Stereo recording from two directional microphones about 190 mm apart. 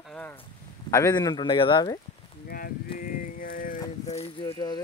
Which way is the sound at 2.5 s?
50° left (ahead or behind).